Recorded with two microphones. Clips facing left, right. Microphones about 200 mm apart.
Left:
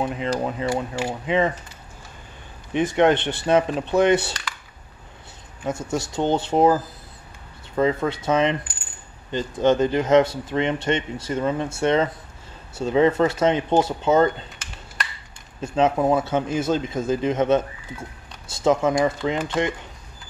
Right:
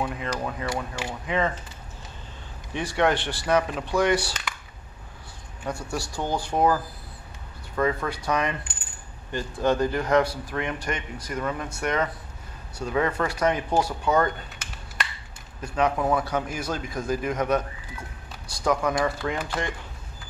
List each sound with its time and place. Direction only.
0.0 s a man's voice: 20° left (ahead or behind)
2.7 s a man's voice: 20° left (ahead or behind)
5.7 s a man's voice: 20° left (ahead or behind)
15.6 s a man's voice: 25° left (ahead or behind)